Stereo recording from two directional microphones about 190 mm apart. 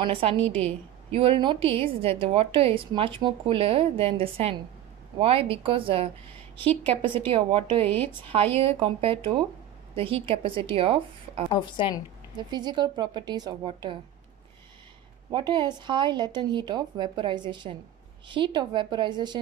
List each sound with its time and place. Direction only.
0.0 s a woman's voice: 30° right (ahead or behind)
6.6 s a woman's voice: 10° left (ahead or behind)
7.0 s a woman's voice: 25° right (ahead or behind)
11.5 s a woman's voice: 25° left (ahead or behind)
12.4 s a woman's voice: 25° right (ahead or behind)
15.3 s a woman's voice: 25° right (ahead or behind)